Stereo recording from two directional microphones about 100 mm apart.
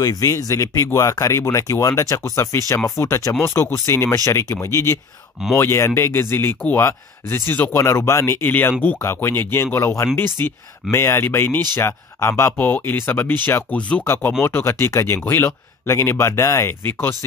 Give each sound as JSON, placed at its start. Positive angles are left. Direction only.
{"t": 0.0, "sound": "speech", "side_deg": 35}